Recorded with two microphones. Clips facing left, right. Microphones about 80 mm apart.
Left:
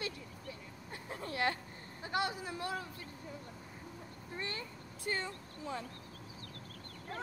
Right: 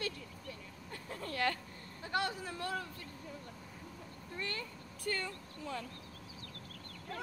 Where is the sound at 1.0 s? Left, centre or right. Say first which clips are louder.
Even; left.